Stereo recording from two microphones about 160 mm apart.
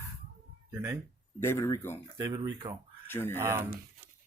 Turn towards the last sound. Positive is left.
turn(degrees=-15)  # may be behind; listen again after turning